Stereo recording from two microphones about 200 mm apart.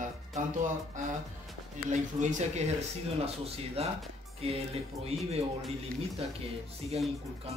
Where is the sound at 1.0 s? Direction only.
40° right (ahead or behind).